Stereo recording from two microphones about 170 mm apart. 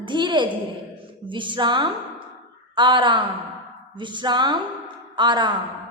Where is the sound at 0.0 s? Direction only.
25° right (ahead or behind).